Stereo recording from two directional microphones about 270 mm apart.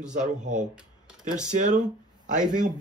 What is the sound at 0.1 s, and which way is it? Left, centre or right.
Speech, right.